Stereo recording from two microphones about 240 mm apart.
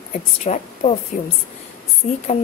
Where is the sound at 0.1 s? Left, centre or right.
Left.